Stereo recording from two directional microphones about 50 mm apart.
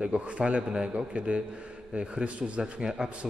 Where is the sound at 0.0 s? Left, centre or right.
Right.